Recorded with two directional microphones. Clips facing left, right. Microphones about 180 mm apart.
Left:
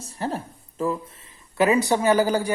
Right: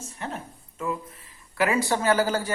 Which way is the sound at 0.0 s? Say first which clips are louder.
Left 6 dB; 35° left (ahead or behind).